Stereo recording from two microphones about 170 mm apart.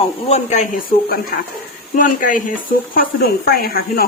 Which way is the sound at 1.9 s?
50° left (ahead or behind).